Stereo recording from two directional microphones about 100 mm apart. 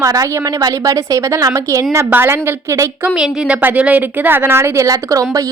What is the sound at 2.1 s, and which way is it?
Speech, 20° right (ahead or behind).